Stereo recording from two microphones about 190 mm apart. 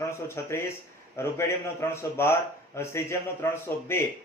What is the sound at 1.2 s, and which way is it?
A man's voice, 15° left (ahead or behind).